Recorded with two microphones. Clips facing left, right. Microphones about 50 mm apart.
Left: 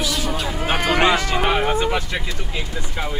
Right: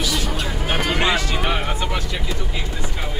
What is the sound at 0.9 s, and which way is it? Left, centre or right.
Speech, left.